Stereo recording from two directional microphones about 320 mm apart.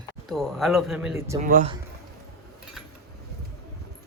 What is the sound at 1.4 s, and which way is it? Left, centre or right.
Speech, right.